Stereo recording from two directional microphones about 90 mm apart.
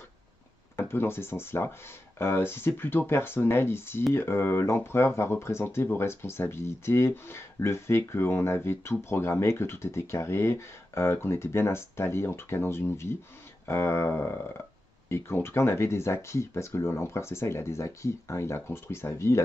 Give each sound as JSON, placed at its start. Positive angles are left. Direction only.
{"t": 0.7, "sound": "speech", "side_deg": 25}